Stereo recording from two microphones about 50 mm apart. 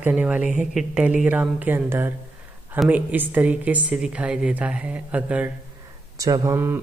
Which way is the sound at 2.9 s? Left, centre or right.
Right.